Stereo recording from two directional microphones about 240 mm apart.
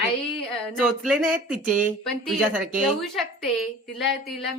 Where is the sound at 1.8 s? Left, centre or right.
Centre.